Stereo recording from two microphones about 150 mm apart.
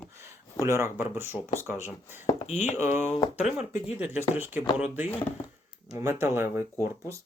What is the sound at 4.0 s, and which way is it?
Speech, 15° right (ahead or behind).